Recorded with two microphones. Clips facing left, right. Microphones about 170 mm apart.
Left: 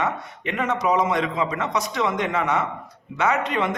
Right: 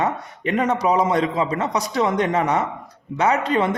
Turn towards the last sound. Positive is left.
turn(degrees=-35)  # may be behind; listen again after turning